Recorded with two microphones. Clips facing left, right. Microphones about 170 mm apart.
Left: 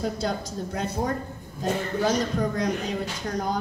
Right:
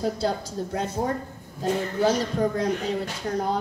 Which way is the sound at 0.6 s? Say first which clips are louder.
Right 2 dB; 30° right (ahead or behind).